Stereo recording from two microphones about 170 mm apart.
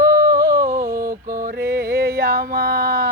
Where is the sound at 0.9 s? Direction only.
55° right (ahead or behind).